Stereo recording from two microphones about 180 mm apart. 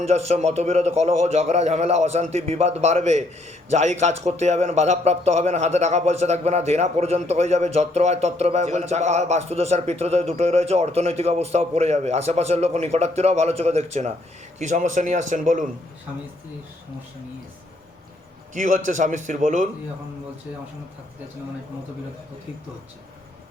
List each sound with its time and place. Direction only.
0.0 s a man's voice: 35° right (ahead or behind)
18.5 s a man's voice: 45° right (ahead or behind)